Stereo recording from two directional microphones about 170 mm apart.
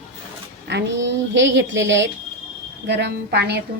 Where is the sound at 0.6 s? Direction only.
90° right.